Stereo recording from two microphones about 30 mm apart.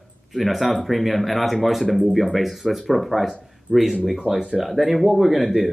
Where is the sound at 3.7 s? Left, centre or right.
Left.